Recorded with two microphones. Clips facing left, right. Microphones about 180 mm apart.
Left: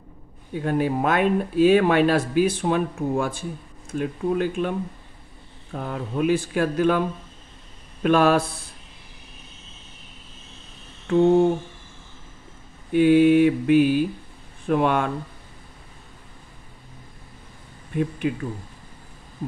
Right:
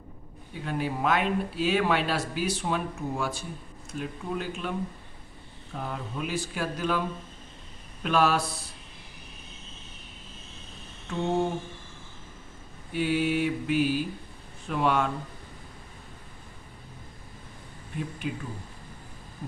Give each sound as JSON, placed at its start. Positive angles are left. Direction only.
{"t": 0.6, "sound": "speech", "side_deg": 50}
{"t": 8.0, "sound": "speech", "side_deg": 55}
{"t": 12.9, "sound": "speech", "side_deg": 55}
{"t": 17.9, "sound": "speech", "side_deg": 60}